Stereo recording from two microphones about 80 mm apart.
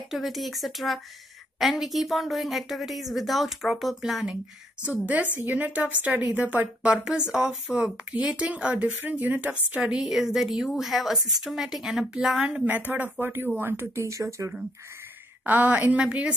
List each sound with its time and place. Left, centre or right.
0.1 s a woman's voice: centre
5.0 s a woman's voice: centre; by 14.5 s right
15.4 s a woman's voice: right